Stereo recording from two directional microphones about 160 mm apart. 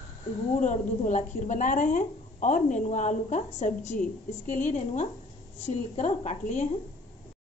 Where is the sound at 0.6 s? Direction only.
50° left (ahead or behind).